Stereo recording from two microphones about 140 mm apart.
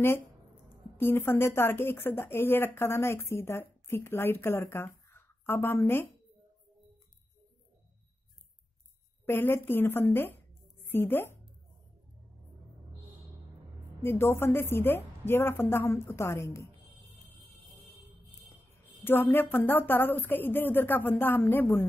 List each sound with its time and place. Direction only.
0.9 s speech: 15° left (ahead or behind)
9.2 s speech: 15° left (ahead or behind)
14.0 s a woman's voice: 15° left (ahead or behind)
19.0 s speech: 15° left (ahead or behind)